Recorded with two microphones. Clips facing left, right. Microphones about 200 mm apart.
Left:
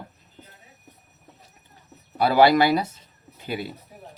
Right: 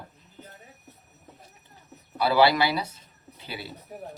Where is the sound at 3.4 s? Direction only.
45° left (ahead or behind).